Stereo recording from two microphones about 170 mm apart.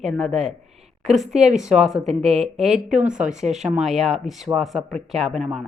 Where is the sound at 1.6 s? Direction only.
5° right (ahead or behind).